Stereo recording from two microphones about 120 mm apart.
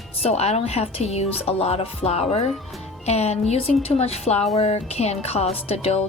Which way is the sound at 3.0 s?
60° left (ahead or behind).